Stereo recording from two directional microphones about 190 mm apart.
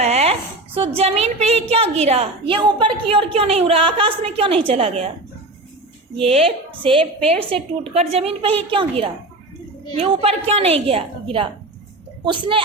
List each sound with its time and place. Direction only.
0.0 s a woman's voice: 35° right (ahead or behind)
6.1 s a woman's voice: 30° right (ahead or behind)